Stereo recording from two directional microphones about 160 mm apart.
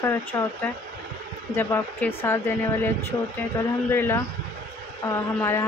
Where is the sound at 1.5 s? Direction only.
15° left (ahead or behind).